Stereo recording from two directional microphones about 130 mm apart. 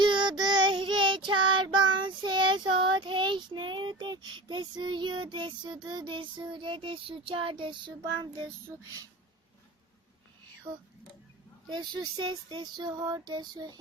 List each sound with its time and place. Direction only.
0.0 s child singing: 35° right (ahead or behind)
11.7 s child singing: 35° right (ahead or behind)